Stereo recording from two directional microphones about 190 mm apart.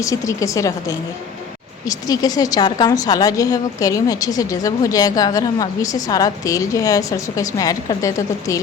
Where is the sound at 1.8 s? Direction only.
20° left (ahead or behind).